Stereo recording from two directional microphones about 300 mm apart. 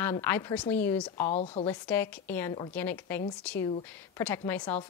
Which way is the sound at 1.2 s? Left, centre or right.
Left.